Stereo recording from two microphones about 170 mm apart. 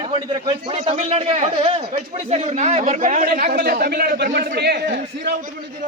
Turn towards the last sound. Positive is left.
turn(degrees=-80)